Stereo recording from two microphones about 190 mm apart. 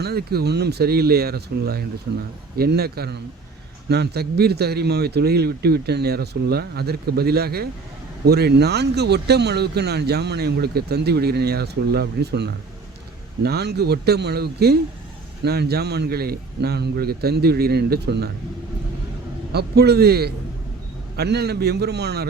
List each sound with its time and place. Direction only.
0.0 s speech: 55° right (ahead or behind)
19.5 s speech: 55° right (ahead or behind)